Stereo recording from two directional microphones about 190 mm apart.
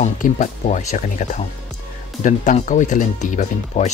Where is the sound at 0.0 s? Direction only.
40° left (ahead or behind).